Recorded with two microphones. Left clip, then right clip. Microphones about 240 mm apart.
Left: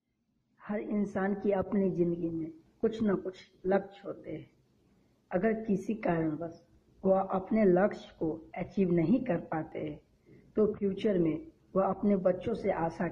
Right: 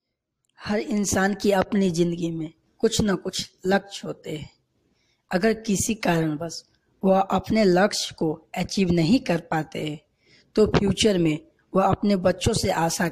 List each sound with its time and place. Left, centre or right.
0.6 s speech: right